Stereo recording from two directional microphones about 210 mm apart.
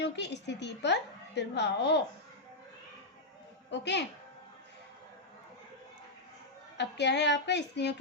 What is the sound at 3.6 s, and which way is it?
Speech, 55° left (ahead or behind).